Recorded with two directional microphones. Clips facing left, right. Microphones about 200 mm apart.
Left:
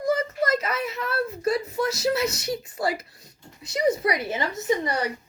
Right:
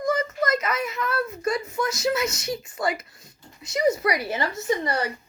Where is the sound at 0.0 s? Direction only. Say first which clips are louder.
Even; 35° left (ahead or behind).